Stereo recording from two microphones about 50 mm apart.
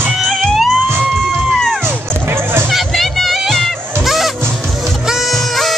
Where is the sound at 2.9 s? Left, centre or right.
Centre.